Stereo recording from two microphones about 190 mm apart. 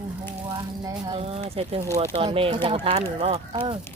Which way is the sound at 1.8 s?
15° right (ahead or behind).